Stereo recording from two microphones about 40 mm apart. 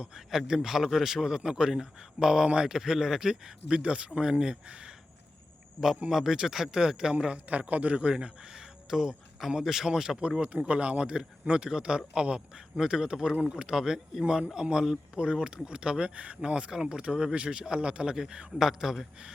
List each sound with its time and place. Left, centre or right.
0.2 s speech: centre
4.6 s a man's voice: right
6.1 s a man's voice: centre
7.3 s a man's voice: right
8.1 s speech: centre
10.6 s a man's voice: right; by 19.0 s centre